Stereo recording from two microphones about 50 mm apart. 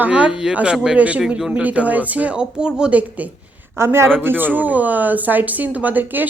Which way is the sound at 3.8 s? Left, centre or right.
Right.